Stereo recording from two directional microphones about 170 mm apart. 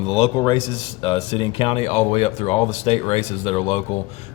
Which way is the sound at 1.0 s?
25° left (ahead or behind).